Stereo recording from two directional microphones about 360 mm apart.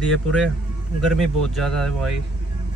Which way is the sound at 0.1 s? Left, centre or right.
Centre.